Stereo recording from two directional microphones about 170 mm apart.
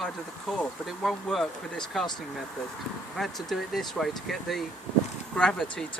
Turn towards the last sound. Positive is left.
turn(degrees=5)  # may be behind; listen again after turning